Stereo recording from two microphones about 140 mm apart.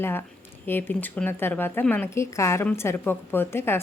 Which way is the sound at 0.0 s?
15° left (ahead or behind).